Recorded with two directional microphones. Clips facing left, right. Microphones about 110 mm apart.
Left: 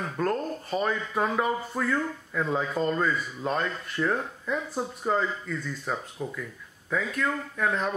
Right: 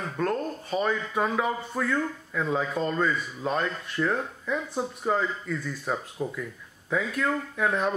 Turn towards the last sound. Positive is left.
turn(degrees=-5)  # may be behind; listen again after turning